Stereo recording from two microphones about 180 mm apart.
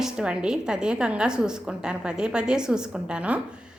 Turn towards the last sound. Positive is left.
turn(degrees=-5)  # may be behind; listen again after turning